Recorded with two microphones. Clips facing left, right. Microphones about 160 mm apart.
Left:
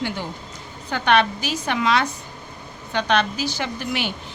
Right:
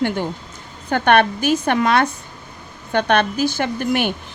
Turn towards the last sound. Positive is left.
turn(degrees=-50)  # may be behind; listen again after turning